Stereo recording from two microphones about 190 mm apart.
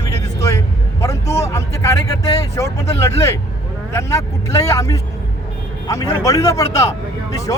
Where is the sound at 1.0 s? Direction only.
15° left (ahead or behind).